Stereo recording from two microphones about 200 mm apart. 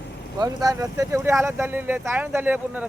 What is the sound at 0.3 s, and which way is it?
Speech, 20° right (ahead or behind).